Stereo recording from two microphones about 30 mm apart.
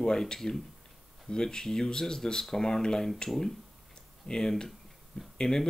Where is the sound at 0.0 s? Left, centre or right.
Left.